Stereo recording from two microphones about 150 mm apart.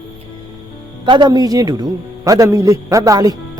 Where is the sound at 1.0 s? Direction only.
30° right (ahead or behind).